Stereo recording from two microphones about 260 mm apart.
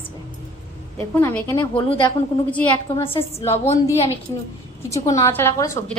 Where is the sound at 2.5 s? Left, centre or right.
Centre.